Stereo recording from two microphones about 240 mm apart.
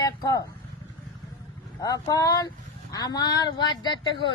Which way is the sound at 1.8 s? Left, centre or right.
Centre.